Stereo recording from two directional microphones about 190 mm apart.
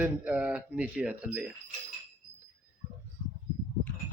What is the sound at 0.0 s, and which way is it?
Speech, 5° right (ahead or behind).